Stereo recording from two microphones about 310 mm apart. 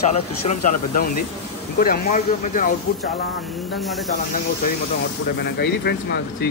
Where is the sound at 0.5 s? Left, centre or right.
Left.